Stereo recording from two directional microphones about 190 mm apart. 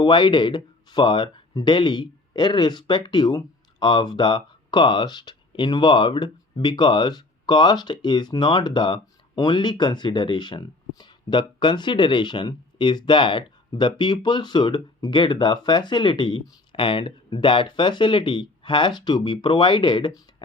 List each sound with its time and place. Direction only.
0.0 s speech: 25° left (ahead or behind)